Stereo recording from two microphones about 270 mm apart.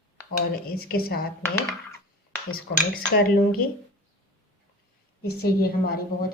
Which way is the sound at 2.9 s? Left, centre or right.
Left.